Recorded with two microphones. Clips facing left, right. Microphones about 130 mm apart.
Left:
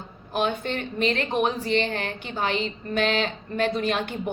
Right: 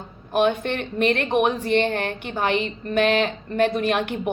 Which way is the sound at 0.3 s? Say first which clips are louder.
Right 5 dB; 55° right (ahead or behind).